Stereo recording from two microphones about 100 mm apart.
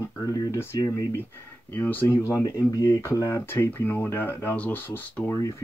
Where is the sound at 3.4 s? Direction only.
20° left (ahead or behind).